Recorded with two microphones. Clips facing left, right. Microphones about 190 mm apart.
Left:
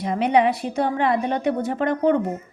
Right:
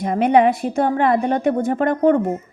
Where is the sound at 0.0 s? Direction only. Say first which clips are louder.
Right 4 dB; 50° right (ahead or behind).